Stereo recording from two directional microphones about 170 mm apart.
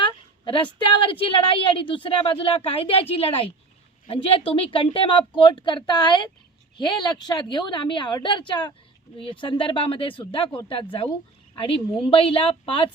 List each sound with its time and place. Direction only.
0.0 s a woman's voice: 30° left (ahead or behind)